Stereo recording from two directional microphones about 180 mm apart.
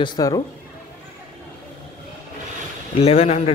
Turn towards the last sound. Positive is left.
turn(degrees=35)  # may be behind; listen again after turning